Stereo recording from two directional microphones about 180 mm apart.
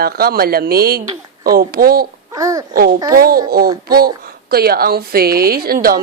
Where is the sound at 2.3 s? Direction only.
20° right (ahead or behind).